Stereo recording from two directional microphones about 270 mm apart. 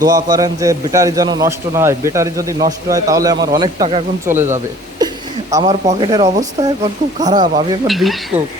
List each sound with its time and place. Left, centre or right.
0.0 s a man's voice: centre
7.9 s speech: centre